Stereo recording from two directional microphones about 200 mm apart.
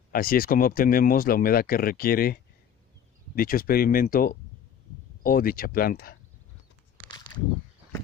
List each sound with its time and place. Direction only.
0.1 s speech: 45° left (ahead or behind)